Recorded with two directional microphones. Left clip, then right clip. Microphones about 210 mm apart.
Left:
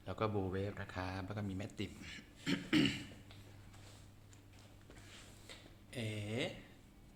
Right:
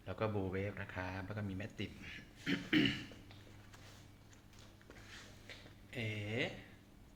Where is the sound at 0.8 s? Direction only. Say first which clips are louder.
Even; 20° left (ahead or behind).